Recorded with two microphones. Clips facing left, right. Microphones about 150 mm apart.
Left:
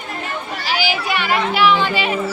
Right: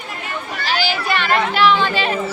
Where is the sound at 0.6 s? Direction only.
10° left (ahead or behind).